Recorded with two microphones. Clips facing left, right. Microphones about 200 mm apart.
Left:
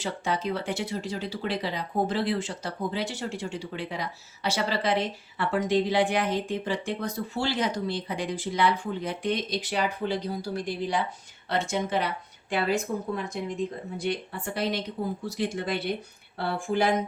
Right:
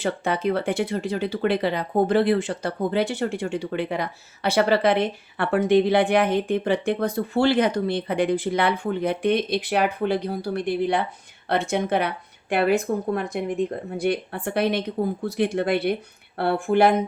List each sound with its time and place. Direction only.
0.0 s speech: 60° right (ahead or behind)